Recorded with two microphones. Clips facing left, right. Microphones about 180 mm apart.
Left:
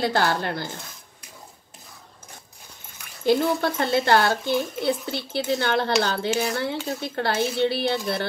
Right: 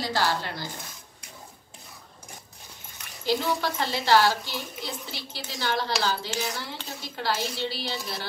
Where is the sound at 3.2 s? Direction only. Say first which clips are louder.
Left 6 dB; 55° left (ahead or behind).